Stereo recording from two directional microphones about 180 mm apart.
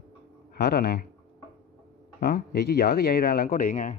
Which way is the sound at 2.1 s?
60° left (ahead or behind).